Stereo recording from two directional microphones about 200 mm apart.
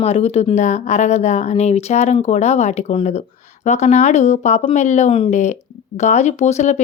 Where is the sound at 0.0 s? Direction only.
30° left (ahead or behind).